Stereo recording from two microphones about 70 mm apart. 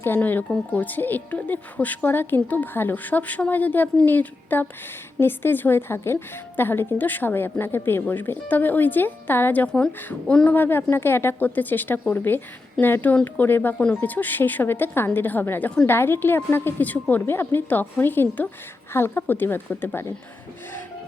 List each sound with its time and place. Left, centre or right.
0.0 s a woman's voice: left
10.5 s speech: left
13.7 s speech: centre
14.0 s a woman's voice: left